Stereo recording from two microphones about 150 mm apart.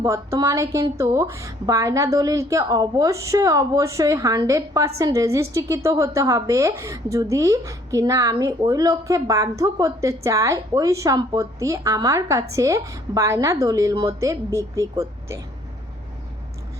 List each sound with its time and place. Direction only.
0.0 s speech: 20° right (ahead or behind)